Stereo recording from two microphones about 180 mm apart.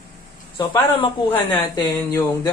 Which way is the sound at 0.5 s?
25° left (ahead or behind).